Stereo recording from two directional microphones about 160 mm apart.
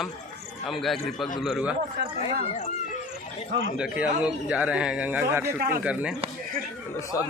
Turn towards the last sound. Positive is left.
turn(degrees=20)  # may be behind; listen again after turning